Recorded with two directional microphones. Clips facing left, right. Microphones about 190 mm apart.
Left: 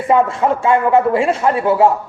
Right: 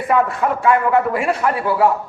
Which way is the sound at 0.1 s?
25° left (ahead or behind).